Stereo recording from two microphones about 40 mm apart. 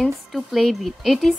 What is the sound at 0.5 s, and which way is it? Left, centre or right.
Speech, centre.